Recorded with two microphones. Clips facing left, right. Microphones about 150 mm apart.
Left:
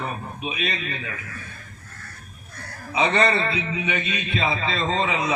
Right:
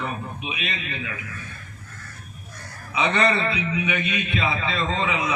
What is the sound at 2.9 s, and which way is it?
A man's voice, 35° left (ahead or behind).